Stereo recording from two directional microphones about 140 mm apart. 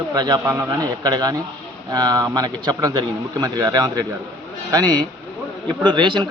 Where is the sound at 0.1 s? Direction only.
30° right (ahead or behind).